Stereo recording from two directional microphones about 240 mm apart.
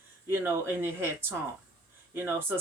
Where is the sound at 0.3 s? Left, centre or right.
Centre.